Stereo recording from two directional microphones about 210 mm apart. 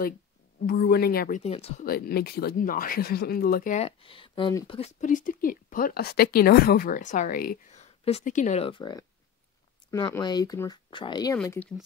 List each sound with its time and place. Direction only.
0.6 s speech: 45° left (ahead or behind)
1.4 s speech: 30° left (ahead or behind)
1.9 s speech: 45° left (ahead or behind)
7.8 s speech: 30° left (ahead or behind); by 11.7 s 10° left (ahead or behind)